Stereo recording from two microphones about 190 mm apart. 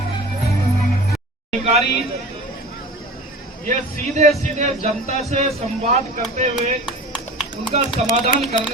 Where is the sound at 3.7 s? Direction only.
40° right (ahead or behind).